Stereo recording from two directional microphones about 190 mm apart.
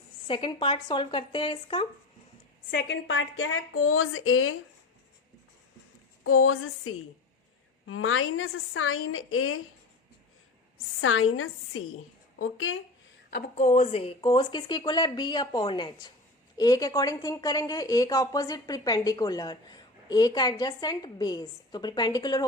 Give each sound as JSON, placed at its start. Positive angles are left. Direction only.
{"t": 0.3, "sound": "speech", "side_deg": 25}
{"t": 2.6, "sound": "speech", "side_deg": 65}
{"t": 6.2, "sound": "speech", "side_deg": 90}
{"t": 11.0, "sound": "speech", "side_deg": 90}
{"t": 13.3, "sound": "speech", "side_deg": 40}